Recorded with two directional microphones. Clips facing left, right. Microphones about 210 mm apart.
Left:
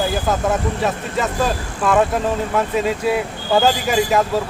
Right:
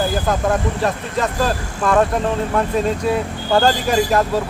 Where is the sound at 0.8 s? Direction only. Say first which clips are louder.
Right 1 dB; centre (ahead or behind).